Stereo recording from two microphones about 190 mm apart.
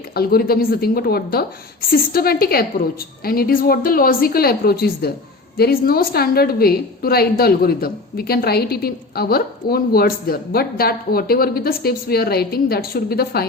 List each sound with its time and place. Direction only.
0.1 s a woman's voice: 55° left (ahead or behind)